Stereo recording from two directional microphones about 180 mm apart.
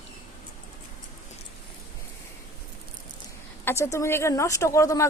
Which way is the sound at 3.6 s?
15° left (ahead or behind).